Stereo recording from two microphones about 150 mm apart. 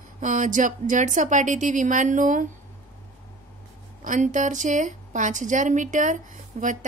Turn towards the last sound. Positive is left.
turn(degrees=-55)  # may be behind; listen again after turning